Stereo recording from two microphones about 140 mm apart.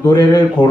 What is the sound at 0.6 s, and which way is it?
Speech, 35° left (ahead or behind).